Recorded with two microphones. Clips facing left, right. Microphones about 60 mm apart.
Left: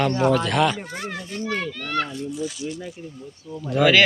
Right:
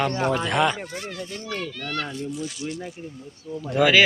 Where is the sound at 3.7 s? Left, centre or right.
Centre.